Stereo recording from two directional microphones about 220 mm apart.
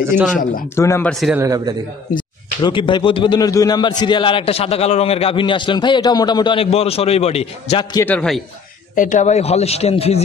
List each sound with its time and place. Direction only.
0.7 s a man's voice: 10° left (ahead or behind)
1.2 s a man's voice: 10° right (ahead or behind)
2.1 s a man's voice: 20° left (ahead or behind)
7.9 s a man's voice: 10° left (ahead or behind)
8.9 s a man's voice: 35° left (ahead or behind)